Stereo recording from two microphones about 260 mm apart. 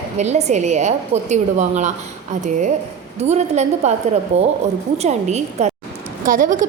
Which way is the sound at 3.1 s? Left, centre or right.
Right.